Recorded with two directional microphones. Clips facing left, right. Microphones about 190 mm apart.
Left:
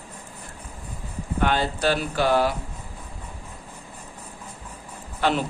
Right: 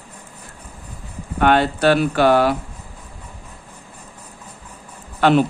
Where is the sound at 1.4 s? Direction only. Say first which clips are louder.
Right 7 dB; 65° right (ahead or behind).